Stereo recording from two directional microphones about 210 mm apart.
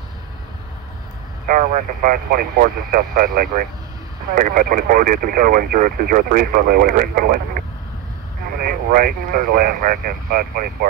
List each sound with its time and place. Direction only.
1.5 s speech: 40° right (ahead or behind)